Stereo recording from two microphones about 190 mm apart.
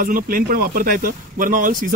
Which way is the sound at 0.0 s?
50° right (ahead or behind).